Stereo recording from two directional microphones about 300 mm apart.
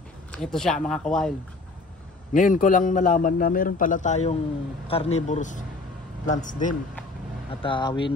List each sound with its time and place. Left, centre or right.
0.3 s speech: centre
2.3 s a man's voice: left